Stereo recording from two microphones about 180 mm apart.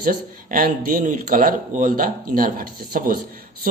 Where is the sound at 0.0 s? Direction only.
50° right (ahead or behind).